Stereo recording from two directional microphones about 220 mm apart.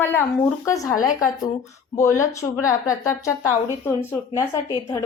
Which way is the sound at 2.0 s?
15° left (ahead or behind).